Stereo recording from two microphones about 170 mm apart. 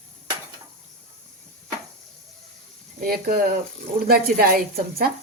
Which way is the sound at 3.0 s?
60° right (ahead or behind).